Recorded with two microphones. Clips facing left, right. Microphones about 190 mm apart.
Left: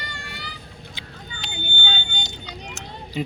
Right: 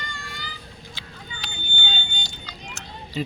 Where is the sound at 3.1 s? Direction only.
15° left (ahead or behind).